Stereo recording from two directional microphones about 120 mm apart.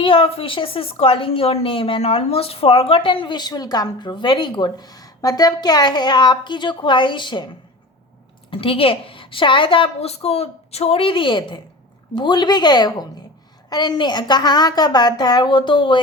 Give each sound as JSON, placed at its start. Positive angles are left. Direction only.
{"t": 0.0, "sound": "a woman's voice", "side_deg": 50}
{"t": 8.4, "sound": "a woman's voice", "side_deg": 50}